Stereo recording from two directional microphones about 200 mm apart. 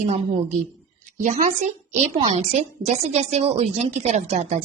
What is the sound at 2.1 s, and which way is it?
A woman's voice, 30° right (ahead or behind).